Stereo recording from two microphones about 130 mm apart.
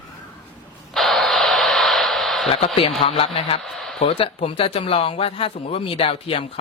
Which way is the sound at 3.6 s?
Centre (ahead or behind).